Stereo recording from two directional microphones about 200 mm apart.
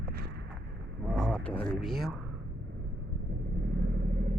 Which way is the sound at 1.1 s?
5° left (ahead or behind).